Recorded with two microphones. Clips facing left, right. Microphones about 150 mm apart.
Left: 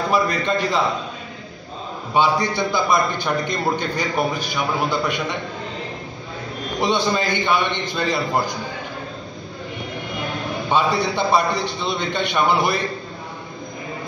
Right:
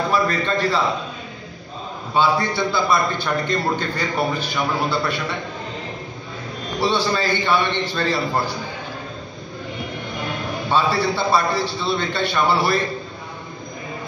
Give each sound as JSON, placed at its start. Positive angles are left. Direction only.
{"t": 0.1, "sound": "a man's voice", "side_deg": 15}
{"t": 2.1, "sound": "a man's voice", "side_deg": 15}
{"t": 6.8, "sound": "a man's voice", "side_deg": 20}
{"t": 10.7, "sound": "a man's voice", "side_deg": 15}